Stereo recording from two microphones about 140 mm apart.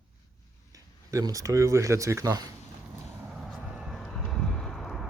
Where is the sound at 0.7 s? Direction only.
25° right (ahead or behind).